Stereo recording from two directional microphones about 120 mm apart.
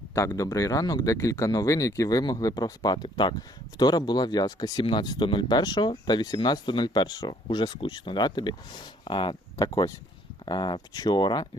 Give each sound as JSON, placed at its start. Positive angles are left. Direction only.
{"t": 0.1, "sound": "speech", "side_deg": 25}